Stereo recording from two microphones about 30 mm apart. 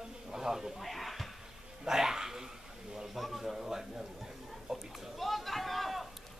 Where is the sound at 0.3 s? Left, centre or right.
Centre.